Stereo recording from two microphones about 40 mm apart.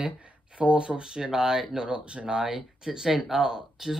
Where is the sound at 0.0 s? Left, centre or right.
Right; by 1.9 s centre.